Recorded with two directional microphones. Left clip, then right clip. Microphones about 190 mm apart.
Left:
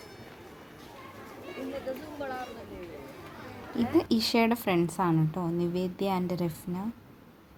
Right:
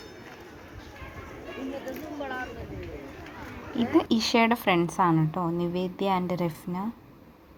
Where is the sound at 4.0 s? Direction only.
5° right (ahead or behind).